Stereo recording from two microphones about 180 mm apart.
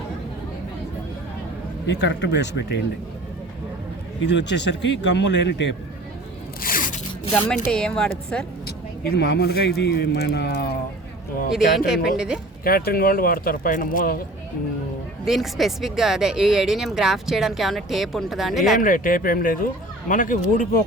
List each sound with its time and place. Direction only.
1.9 s speech: 75° left (ahead or behind)
4.3 s speech: 75° left (ahead or behind)
6.6 s a sound: 50° left (ahead or behind)
7.4 s speech: 5° left (ahead or behind)
8.6 s speech: 65° left (ahead or behind)
12.0 s speech: 5° right (ahead or behind)
12.6 s speech: 55° left (ahead or behind)
15.2 s speech: centre (ahead or behind)
18.8 s speech: 50° left (ahead or behind)